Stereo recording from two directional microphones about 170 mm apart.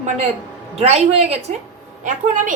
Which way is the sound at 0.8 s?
40° right (ahead or behind).